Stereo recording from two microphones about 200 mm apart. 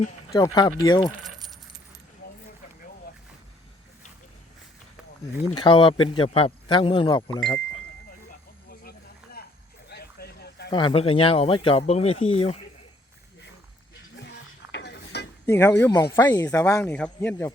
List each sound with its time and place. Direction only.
0.3 s speech: 20° left (ahead or behind)
5.5 s speech: 25° left (ahead or behind)
8.7 s a sound: 50° left (ahead or behind)
10.7 s speech: 25° left (ahead or behind)
14.2 s music: 60° left (ahead or behind)
15.4 s speech: 10° left (ahead or behind)